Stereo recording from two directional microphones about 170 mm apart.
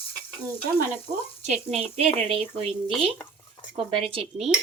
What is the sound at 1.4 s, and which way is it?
Speech, 40° right (ahead or behind).